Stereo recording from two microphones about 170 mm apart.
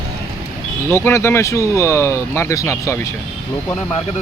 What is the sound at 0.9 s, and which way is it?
Speech, 15° left (ahead or behind).